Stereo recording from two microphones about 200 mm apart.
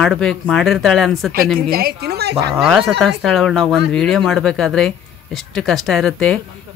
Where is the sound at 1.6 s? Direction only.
50° right (ahead or behind).